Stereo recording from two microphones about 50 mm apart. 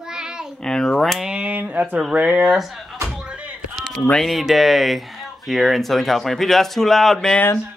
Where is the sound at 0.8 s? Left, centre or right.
Centre.